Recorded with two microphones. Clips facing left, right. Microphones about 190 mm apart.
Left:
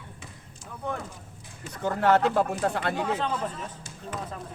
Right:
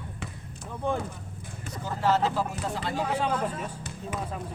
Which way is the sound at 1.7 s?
60° left (ahead or behind).